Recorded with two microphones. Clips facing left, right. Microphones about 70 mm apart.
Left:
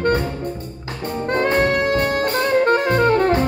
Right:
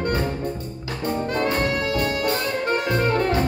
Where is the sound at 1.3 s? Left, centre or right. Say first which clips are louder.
Left 7 dB; left.